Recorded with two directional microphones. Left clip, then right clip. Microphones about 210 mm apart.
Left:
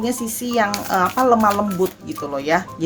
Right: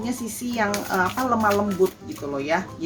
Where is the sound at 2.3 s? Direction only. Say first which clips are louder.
Left 5 dB; 50° left (ahead or behind).